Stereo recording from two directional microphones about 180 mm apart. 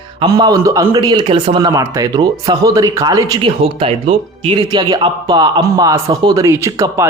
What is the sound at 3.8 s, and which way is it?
Speech, 35° right (ahead or behind).